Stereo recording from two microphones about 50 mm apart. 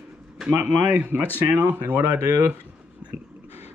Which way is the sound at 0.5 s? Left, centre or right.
Right.